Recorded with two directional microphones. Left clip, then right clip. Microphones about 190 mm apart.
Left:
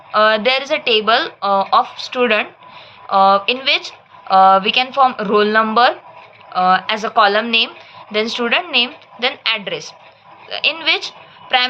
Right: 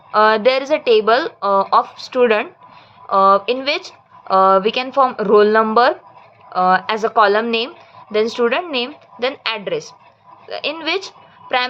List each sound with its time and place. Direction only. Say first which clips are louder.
0.1 s a woman's voice: even; 50° right (ahead or behind)